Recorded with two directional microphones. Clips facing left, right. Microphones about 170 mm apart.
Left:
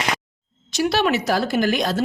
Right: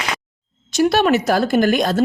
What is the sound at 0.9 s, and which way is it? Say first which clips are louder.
A woman's voice: right 3 dB; 50° right (ahead or behind).